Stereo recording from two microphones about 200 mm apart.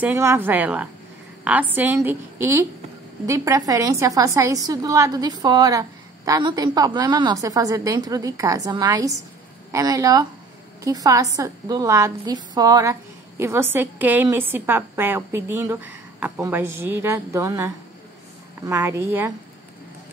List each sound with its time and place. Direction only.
0.0 s a woman's voice: 10° right (ahead or behind)